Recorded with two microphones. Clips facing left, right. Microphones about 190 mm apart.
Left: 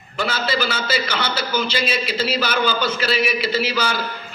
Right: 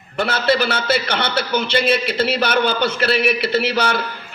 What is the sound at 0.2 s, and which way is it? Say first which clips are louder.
A man's voice: right 4 dB; 60° right (ahead or behind).